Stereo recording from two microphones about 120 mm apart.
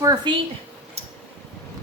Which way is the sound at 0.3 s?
40° right (ahead or behind).